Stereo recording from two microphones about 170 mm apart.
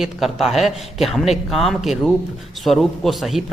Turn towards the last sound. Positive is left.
turn(degrees=0)  # may be behind; listen again after turning